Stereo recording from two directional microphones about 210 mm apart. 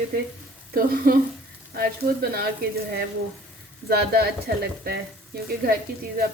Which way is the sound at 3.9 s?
50° right (ahead or behind).